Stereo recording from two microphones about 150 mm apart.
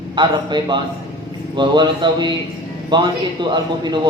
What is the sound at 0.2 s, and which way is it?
A man's voice, 30° right (ahead or behind).